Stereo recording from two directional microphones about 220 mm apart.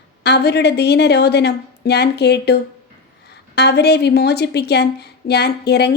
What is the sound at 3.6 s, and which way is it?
A woman's voice, 50° left (ahead or behind).